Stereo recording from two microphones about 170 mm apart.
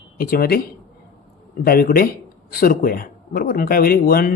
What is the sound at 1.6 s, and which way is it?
Speech, 60° left (ahead or behind).